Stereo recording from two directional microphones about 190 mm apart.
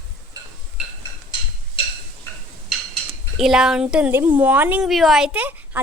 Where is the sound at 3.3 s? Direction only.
Centre (ahead or behind).